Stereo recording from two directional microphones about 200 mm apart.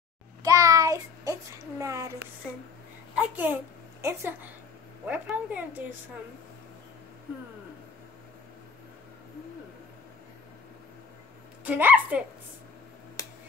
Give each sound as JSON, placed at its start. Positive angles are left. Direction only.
{"t": 0.4, "sound": "a sound", "side_deg": -15}
{"t": 3.2, "sound": "a woman's voice", "side_deg": -10}
{"t": 11.6, "sound": "a woman's voice", "side_deg": -10}
{"t": 13.2, "sound": "finger snapping", "side_deg": 15}